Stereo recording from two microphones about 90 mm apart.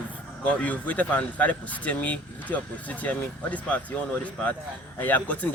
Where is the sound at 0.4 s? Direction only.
15° left (ahead or behind).